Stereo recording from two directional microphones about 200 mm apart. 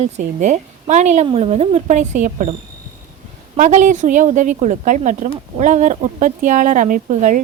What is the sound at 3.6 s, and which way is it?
Speech, 40° right (ahead or behind).